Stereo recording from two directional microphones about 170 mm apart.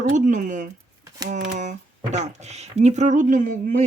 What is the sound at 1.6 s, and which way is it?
Speech, 45° right (ahead or behind).